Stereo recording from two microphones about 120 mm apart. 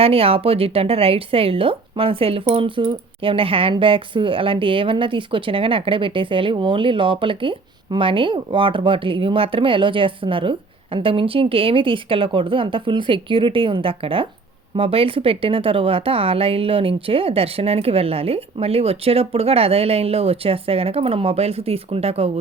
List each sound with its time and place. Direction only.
0.0 s speech: 55° right (ahead or behind)